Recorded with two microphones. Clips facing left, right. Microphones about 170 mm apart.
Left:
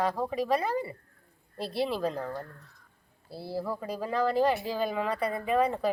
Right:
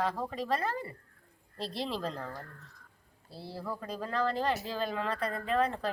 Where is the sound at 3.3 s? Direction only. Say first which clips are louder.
Left 6 dB; 10° left (ahead or behind).